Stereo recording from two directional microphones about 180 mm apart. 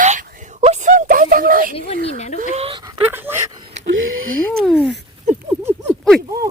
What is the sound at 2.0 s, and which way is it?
Speech, 40° left (ahead or behind).